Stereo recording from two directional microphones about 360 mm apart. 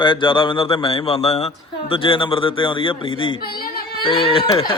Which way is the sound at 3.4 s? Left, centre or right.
Left.